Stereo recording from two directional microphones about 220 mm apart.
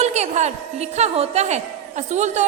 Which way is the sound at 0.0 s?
30° right (ahead or behind).